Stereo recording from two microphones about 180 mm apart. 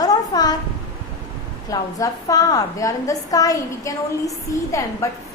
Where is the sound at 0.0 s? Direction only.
20° left (ahead or behind).